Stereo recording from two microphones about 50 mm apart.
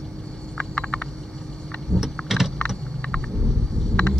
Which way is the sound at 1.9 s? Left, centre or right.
Centre.